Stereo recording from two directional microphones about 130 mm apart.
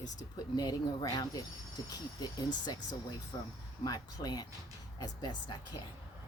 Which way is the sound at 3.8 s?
30° left (ahead or behind).